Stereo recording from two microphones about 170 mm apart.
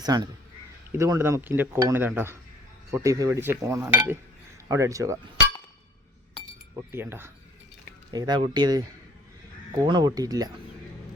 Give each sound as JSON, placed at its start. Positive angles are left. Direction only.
{"t": 0.0, "sound": "speech", "side_deg": -25}
{"t": 6.7, "sound": "speech", "side_deg": -15}
{"t": 8.1, "sound": "speech", "side_deg": -25}
{"t": 9.8, "sound": "speech", "side_deg": -25}